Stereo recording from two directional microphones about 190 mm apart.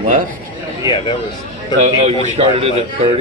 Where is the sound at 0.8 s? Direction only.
25° left (ahead or behind).